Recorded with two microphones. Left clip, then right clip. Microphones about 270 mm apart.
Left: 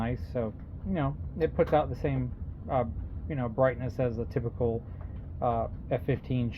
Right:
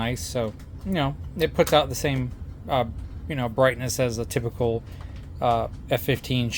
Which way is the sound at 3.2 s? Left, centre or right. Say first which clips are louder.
Right 6 dB; right.